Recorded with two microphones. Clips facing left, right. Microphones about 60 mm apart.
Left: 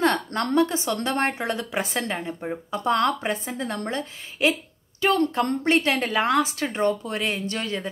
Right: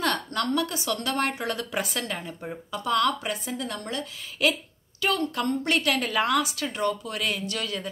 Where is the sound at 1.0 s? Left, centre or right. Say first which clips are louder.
Left 2 dB; left.